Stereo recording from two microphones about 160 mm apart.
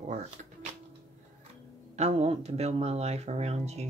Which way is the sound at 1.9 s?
40° right (ahead or behind).